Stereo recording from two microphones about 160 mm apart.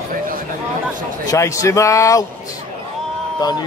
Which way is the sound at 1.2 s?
20° left (ahead or behind).